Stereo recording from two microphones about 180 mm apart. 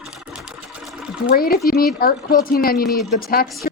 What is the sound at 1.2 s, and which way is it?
Speech, 55° left (ahead or behind).